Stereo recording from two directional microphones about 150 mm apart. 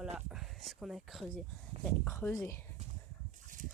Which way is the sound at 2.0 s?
20° left (ahead or behind).